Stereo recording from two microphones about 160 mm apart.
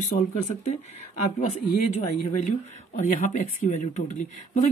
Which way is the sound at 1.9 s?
45° left (ahead or behind).